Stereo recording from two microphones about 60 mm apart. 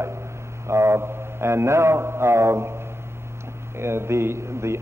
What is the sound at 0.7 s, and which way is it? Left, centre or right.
Mantra, right.